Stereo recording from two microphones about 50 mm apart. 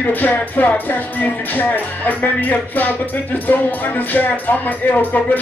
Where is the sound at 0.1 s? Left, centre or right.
Left.